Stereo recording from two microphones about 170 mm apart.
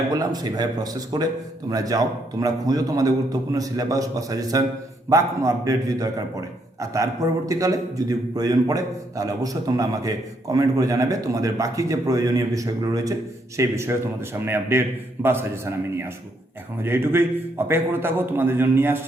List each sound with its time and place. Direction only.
0.1 s a man's voice: 20° right (ahead or behind)